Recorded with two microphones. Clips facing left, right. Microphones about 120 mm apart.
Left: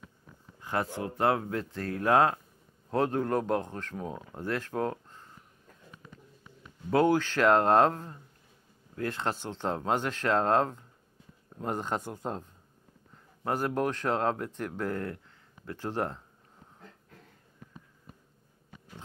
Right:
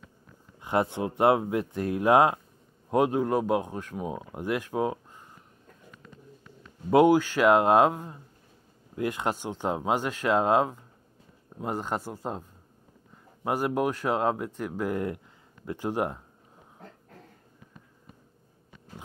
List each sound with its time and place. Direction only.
0.6 s speech: 20° right (ahead or behind)
6.9 s speech: 15° right (ahead or behind)